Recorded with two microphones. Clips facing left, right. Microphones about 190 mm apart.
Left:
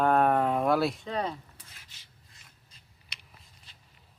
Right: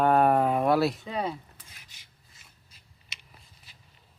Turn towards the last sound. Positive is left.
turn(degrees=0)  # may be behind; listen again after turning